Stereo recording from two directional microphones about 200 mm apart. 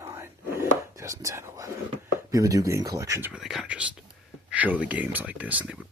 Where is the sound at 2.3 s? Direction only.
15° right (ahead or behind).